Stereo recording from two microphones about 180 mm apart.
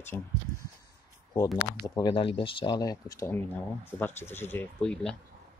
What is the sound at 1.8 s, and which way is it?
Speech, 25° left (ahead or behind).